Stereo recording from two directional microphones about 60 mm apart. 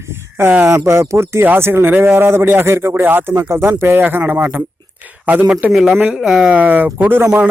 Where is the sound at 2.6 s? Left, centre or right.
Right.